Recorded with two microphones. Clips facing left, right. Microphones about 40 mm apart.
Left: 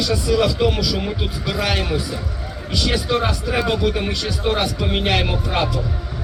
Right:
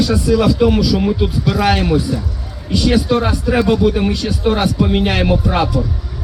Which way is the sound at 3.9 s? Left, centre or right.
Centre.